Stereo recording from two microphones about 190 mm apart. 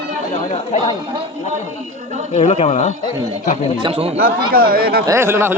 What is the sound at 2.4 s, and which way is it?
Speech, 35° left (ahead or behind).